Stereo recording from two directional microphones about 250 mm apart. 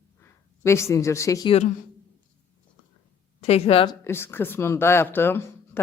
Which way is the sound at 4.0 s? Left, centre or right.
Centre.